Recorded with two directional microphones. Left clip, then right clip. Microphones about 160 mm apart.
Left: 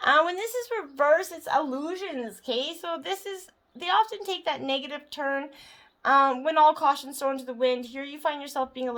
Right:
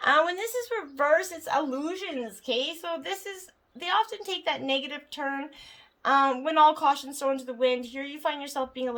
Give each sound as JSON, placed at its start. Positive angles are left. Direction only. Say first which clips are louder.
{"t": 0.0, "sound": "speech", "louder": "left 1 dB", "side_deg": 30}
{"t": 2.5, "sound": "a woman's voice", "louder": "even", "side_deg": 35}